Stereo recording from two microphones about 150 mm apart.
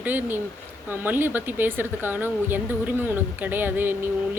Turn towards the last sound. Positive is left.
turn(degrees=-15)  # may be behind; listen again after turning